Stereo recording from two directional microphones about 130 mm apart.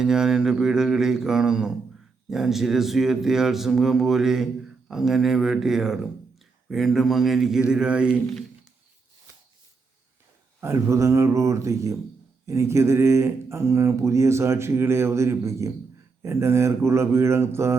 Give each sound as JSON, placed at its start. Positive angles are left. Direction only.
{"t": 0.0, "sound": "speech", "side_deg": -5}
{"t": 10.6, "sound": "speech", "side_deg": -20}